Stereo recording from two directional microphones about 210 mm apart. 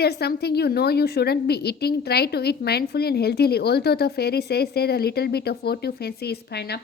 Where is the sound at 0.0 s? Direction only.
50° left (ahead or behind).